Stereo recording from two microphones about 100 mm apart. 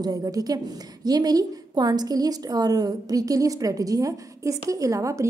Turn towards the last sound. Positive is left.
turn(degrees=-30)  # may be behind; listen again after turning